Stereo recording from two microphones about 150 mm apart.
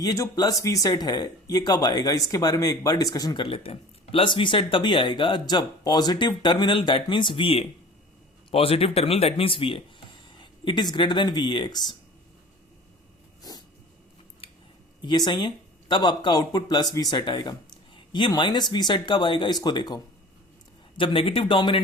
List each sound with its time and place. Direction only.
0.0 s speech: 25° left (ahead or behind)
15.0 s speech: 30° left (ahead or behind)